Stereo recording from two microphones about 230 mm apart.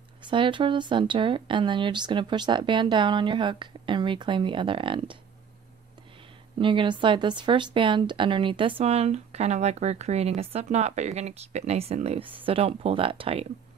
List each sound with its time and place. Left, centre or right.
0.2 s speech: right
6.6 s speech: right